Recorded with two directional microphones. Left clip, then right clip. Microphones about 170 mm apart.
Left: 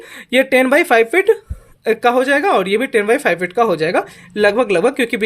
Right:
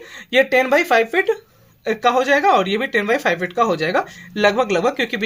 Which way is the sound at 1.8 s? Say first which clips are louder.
Left 3 dB; 35° left (ahead or behind).